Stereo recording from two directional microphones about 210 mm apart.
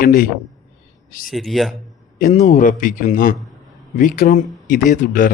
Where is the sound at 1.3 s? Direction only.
Centre (ahead or behind).